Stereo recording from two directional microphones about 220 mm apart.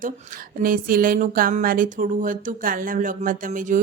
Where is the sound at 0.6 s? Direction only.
40° right (ahead or behind).